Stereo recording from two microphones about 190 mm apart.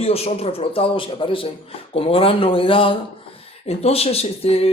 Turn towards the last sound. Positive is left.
turn(degrees=30)  # may be behind; listen again after turning